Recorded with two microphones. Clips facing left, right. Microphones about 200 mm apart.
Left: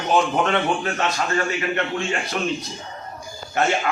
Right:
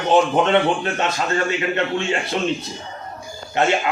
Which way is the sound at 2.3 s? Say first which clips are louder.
Right 2 dB; 25° right (ahead or behind).